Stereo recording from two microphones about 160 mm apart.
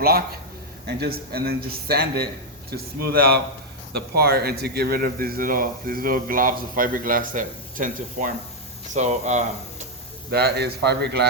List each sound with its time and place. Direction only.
0.9 s a man's voice: 85° right; by 9.4 s 45° right (ahead or behind)
10.3 s speech: 80° right